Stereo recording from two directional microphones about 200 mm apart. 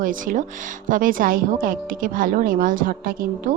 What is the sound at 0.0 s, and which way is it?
A woman's voice, 40° right (ahead or behind).